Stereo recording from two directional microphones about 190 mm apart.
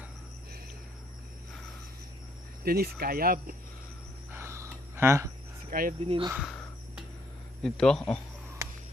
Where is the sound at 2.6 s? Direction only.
55° right (ahead or behind).